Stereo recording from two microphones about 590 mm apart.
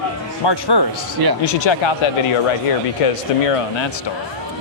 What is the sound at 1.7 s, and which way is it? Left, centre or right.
Speech, left.